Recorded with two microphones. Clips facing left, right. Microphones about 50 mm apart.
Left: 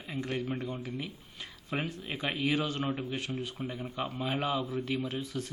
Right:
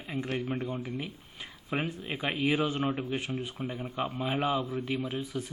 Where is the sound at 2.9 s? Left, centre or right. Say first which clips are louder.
Right 2 dB; centre.